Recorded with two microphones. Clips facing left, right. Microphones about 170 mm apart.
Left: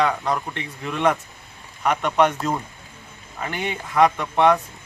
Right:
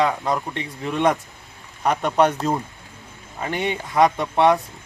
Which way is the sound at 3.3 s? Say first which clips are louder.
Right 3 dB; 30° right (ahead or behind).